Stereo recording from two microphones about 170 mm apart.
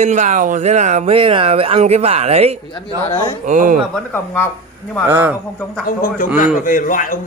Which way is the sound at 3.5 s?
50° right (ahead or behind).